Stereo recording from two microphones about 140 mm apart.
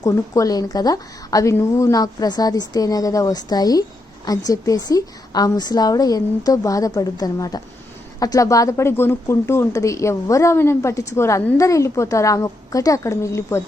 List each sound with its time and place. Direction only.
0.0 s speech: 25° left (ahead or behind)